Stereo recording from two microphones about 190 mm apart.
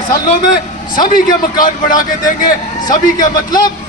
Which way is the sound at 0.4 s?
45° left (ahead or behind).